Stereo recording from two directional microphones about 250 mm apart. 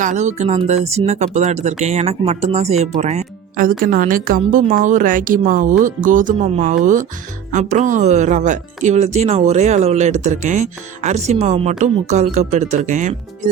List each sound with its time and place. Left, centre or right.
0.0 s speech: right